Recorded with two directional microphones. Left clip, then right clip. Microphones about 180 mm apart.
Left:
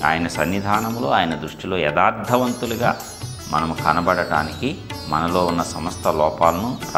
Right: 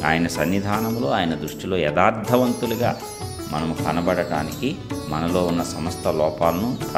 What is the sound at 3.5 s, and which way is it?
Speech, 20° right (ahead or behind).